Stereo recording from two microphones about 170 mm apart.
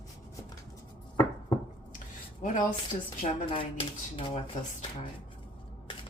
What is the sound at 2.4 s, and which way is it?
Speech, 50° left (ahead or behind).